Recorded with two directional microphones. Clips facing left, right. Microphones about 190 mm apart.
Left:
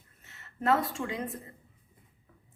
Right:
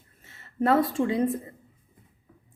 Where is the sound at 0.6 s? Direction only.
35° right (ahead or behind).